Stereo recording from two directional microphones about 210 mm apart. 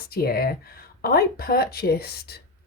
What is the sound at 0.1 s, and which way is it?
Speech, 45° left (ahead or behind).